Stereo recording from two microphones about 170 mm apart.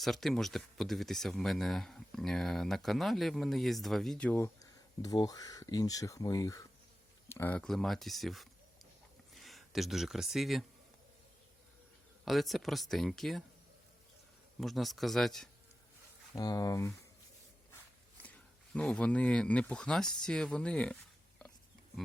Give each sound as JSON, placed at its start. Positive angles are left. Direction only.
{"t": 0.0, "sound": "speech", "side_deg": 0}
{"t": 12.2, "sound": "speech", "side_deg": 0}
{"t": 14.6, "sound": "speech", "side_deg": 0}
{"t": 16.3, "sound": "speech", "side_deg": 20}
{"t": 18.2, "sound": "speech", "side_deg": 5}